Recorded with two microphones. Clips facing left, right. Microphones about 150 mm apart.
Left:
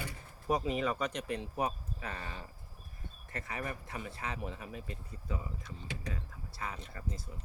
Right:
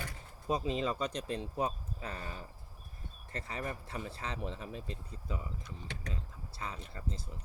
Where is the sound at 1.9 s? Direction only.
30° right (ahead or behind).